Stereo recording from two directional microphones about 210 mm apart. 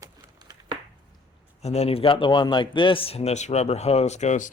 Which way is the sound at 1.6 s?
30° left (ahead or behind).